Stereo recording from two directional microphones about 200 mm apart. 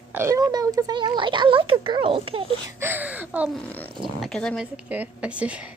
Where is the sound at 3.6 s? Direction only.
10° left (ahead or behind).